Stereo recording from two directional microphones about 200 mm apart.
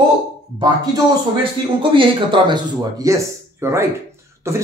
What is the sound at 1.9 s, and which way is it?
Speech, 25° right (ahead or behind).